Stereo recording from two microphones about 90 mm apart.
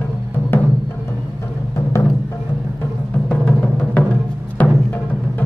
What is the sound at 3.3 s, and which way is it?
Music, 15° left (ahead or behind).